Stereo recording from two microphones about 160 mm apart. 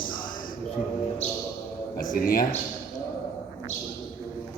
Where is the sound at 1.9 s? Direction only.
60° left (ahead or behind).